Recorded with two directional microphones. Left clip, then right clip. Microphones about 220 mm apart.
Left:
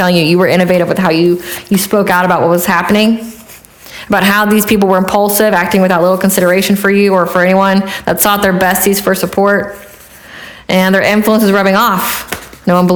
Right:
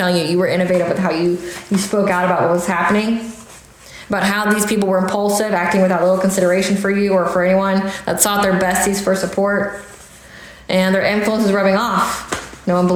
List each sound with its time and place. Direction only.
0.0 s a woman's voice: 40° left (ahead or behind)
10.7 s a woman's voice: 45° left (ahead or behind)